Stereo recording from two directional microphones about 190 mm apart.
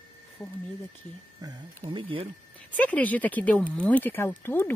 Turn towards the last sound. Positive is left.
turn(degrees=10)  # may be behind; listen again after turning